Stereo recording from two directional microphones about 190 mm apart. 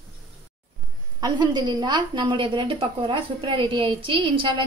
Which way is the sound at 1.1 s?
20° right (ahead or behind).